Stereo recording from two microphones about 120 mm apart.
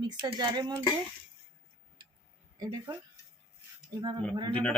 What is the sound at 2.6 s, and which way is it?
Speech, 35° right (ahead or behind).